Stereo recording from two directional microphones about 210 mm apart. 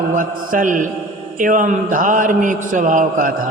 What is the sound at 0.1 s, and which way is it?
A man's voice, 40° right (ahead or behind).